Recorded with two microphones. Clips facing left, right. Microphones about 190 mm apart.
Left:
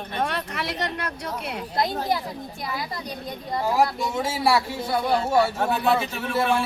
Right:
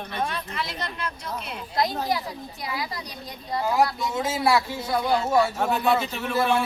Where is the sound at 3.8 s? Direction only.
30° left (ahead or behind).